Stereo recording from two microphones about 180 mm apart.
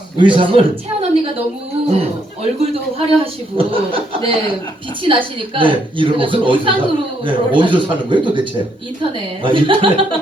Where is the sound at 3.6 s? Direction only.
30° right (ahead or behind).